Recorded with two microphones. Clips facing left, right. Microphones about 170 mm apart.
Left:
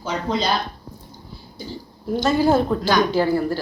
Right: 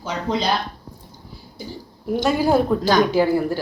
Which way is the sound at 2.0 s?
10° right (ahead or behind).